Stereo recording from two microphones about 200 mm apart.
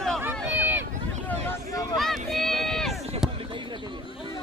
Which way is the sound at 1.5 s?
15° left (ahead or behind).